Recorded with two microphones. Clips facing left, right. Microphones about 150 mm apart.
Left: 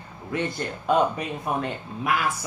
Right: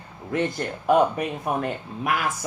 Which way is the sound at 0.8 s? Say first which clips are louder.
Right 3 dB; 55° right (ahead or behind).